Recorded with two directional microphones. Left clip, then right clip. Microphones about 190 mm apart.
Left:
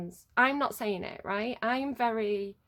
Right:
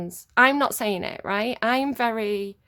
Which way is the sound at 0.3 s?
25° right (ahead or behind).